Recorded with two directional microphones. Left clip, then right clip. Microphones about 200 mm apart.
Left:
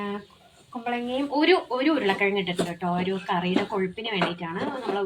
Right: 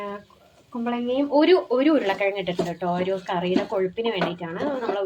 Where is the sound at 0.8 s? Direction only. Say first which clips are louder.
Right 3 dB; 60° right (ahead or behind).